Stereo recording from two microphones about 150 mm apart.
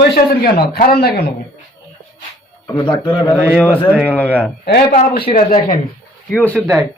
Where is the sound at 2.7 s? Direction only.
35° left (ahead or behind).